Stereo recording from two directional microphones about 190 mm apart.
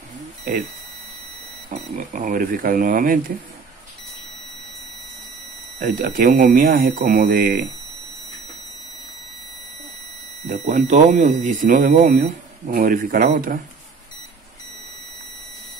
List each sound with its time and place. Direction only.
0.5 s speech: 45° right (ahead or behind)
1.7 s speech: 45° right (ahead or behind)
5.9 s speech: 45° right (ahead or behind)
10.4 s speech: 35° right (ahead or behind)